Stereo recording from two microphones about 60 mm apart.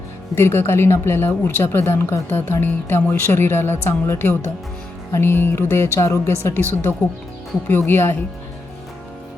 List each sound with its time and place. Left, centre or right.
0.3 s a woman's voice: left